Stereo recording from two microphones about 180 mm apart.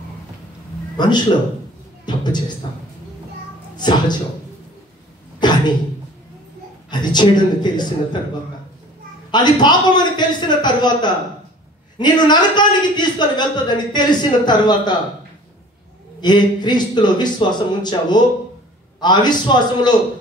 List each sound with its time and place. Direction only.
0.9 s a man's voice: 25° left (ahead or behind)
3.7 s speech: 25° left (ahead or behind)
5.4 s cough: 25° left (ahead or behind)
6.9 s speech: 25° left (ahead or behind)
9.3 s speech: 25° left (ahead or behind)
16.2 s speech: 25° left (ahead or behind)